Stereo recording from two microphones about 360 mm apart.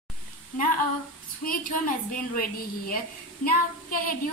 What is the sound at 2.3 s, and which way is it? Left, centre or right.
Child singing, left.